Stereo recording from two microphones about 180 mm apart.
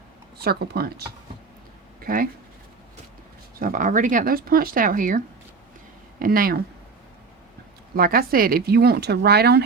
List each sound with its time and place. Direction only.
0.3 s speech: 60° right (ahead or behind)
2.0 s speech: 50° right (ahead or behind)
3.6 s speech: 50° right (ahead or behind)
7.9 s speech: 55° right (ahead or behind)